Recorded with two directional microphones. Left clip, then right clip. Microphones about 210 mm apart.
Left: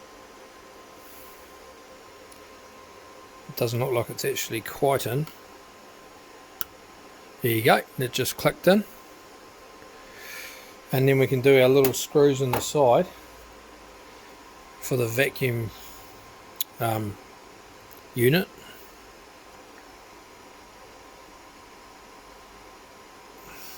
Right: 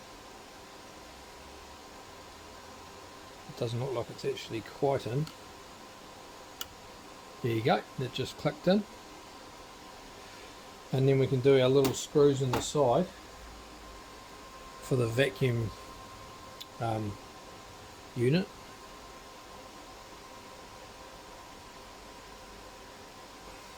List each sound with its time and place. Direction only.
3.5 s speech: 55° left (ahead or behind)
7.4 s speech: 50° left (ahead or behind)
10.9 s speech: 55° left (ahead or behind)
14.8 s speech: 30° left (ahead or behind)
16.6 s a sound: 50° left (ahead or behind)
18.2 s speech: 55° left (ahead or behind)